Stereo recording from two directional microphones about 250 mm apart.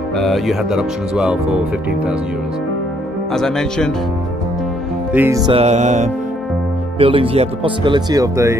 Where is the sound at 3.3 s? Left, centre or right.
Centre.